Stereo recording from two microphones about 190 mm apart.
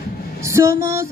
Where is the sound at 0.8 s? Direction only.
15° right (ahead or behind).